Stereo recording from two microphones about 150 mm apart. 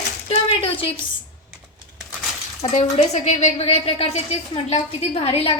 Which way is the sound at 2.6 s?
45° left (ahead or behind).